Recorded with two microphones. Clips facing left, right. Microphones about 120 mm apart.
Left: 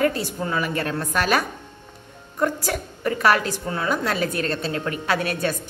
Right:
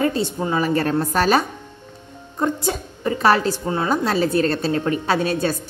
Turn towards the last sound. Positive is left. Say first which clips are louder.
# right 3 dB
turn(degrees=-30)  # may be behind; listen again after turning